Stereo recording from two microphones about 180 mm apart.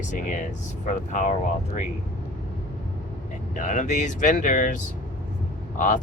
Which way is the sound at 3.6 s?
45° left (ahead or behind).